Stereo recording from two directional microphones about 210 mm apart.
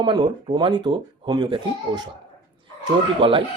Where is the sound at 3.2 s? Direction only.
25° right (ahead or behind).